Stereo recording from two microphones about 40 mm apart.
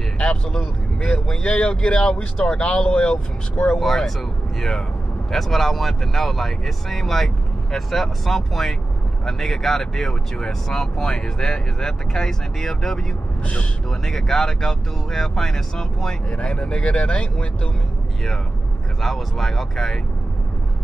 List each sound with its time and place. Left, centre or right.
0.2 s speech: left
3.8 s speech: centre
13.4 s speech: left
13.8 s speech: centre
16.3 s speech: left
18.9 s speech: centre